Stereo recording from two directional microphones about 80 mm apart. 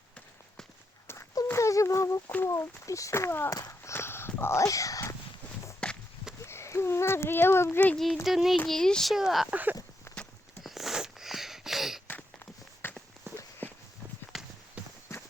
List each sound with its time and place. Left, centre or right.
1.5 s a sound: left
2.8 s speech: left
3.5 s walk: left
4.6 s speech: left
5.8 s walk: centre
6.4 s speech: left
7.9 s speech: centre
9.5 s speech: right
10.6 s a sound: centre
12.8 s walk: left
13.3 s walk: right
13.6 s walk: left
14.3 s walk: centre
14.8 s clip-clop: centre